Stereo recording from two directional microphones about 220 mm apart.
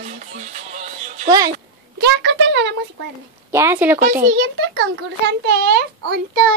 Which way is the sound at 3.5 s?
10° right (ahead or behind).